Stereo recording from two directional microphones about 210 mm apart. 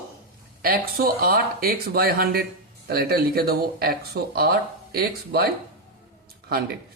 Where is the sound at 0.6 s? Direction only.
45° right (ahead or behind).